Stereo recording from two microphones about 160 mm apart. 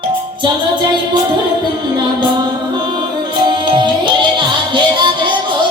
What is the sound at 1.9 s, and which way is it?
Music, 30° right (ahead or behind).